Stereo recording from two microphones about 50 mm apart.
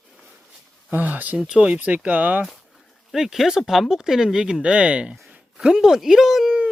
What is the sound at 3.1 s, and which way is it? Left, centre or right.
Speech, centre.